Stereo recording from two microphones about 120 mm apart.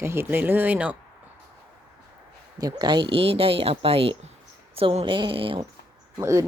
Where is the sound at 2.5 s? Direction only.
35° right (ahead or behind).